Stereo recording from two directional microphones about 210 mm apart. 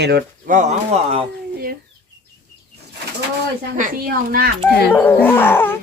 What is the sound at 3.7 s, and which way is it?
Speech, 40° right (ahead or behind).